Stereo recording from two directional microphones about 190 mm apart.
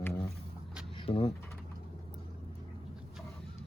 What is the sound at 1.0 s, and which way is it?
Speech, 30° left (ahead or behind).